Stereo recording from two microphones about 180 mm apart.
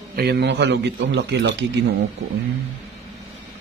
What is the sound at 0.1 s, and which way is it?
A man's voice, 65° right (ahead or behind).